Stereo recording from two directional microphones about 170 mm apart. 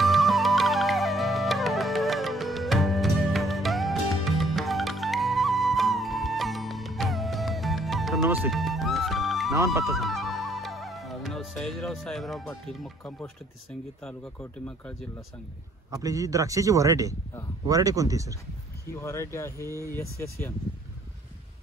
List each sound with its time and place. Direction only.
0.0 s music: centre (ahead or behind)
8.2 s music: 10° right (ahead or behind)
8.5 s music: centre (ahead or behind)
14.0 s speech: 5° left (ahead or behind)
15.9 s a man's voice: 20° right (ahead or behind)
18.9 s speech: 15° left (ahead or behind)